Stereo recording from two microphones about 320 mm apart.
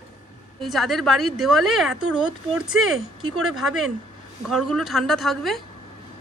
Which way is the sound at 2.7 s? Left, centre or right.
Right.